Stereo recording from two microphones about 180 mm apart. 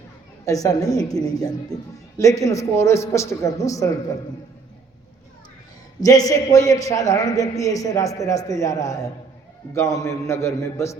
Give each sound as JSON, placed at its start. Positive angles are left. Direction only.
{"t": 0.4, "sound": "a woman's voice", "side_deg": 20}
{"t": 6.0, "sound": "a man's voice", "side_deg": 20}